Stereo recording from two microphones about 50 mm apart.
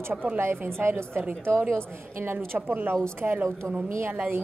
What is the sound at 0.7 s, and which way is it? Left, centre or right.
A woman's voice, right.